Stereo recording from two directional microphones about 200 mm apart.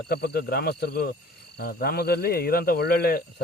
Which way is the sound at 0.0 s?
50° left (ahead or behind).